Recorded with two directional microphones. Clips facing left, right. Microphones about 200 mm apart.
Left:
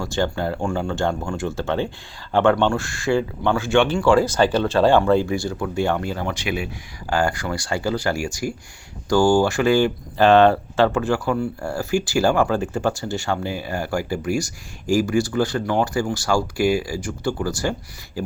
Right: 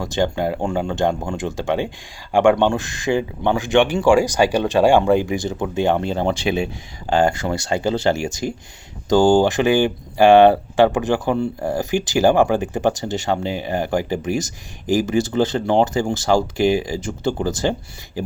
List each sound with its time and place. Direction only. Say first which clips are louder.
0.0 s speech: right 3 dB; 15° right (ahead or behind)